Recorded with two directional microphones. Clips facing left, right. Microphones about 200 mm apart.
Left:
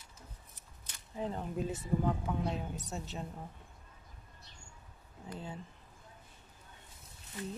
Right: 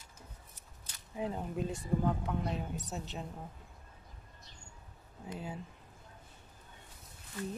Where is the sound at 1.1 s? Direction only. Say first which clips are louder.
Right 1 dB; 10° right (ahead or behind).